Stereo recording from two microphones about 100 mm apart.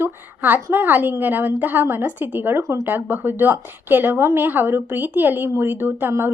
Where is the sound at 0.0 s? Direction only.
20° right (ahead or behind).